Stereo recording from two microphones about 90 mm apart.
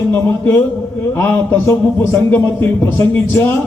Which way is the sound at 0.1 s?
20° left (ahead or behind).